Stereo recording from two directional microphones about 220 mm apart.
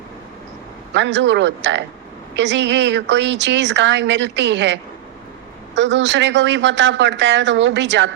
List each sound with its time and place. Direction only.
0.9 s a woman's voice: 55° right (ahead or behind)